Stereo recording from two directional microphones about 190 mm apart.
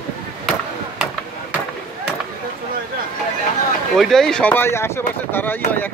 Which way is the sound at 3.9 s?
5° left (ahead or behind).